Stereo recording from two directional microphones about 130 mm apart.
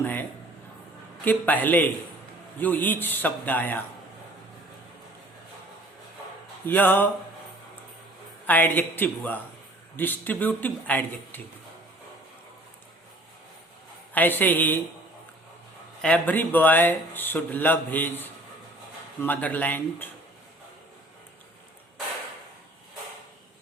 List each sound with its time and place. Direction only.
0.0 s a sound: 15° left (ahead or behind)
1.2 s speech: 15° left (ahead or behind)
6.7 s speech: 15° left (ahead or behind)
8.4 s speech: 15° left (ahead or behind)
14.1 s speech: 15° left (ahead or behind)
16.0 s speech: 10° left (ahead or behind)
19.2 s speech: 15° left (ahead or behind)